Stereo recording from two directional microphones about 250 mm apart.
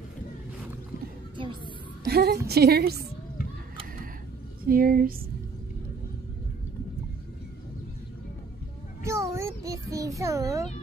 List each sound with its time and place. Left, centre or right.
2.0 s a woman's voice: right
4.6 s a woman's voice: right
9.0 s child singing: centre